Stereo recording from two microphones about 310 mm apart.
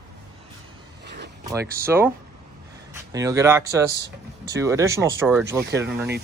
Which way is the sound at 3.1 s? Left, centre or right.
Centre.